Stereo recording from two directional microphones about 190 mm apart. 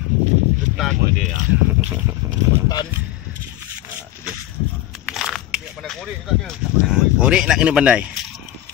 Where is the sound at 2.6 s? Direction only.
20° left (ahead or behind).